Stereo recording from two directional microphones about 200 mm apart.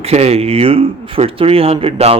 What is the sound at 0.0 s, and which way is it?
Speech, 30° right (ahead or behind).